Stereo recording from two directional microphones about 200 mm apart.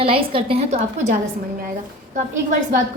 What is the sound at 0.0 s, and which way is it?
Speech, 25° right (ahead or behind).